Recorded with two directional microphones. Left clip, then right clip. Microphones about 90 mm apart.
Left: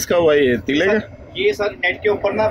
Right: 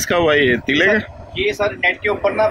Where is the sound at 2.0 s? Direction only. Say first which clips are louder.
Left 2 dB; 20° left (ahead or behind).